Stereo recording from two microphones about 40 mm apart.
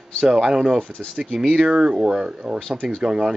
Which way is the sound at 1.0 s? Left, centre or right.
Centre.